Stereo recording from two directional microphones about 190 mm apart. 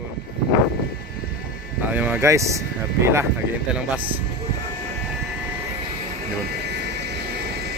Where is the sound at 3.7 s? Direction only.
10° right (ahead or behind).